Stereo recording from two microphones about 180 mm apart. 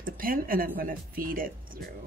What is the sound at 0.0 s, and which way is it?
A woman's voice, 50° right (ahead or behind).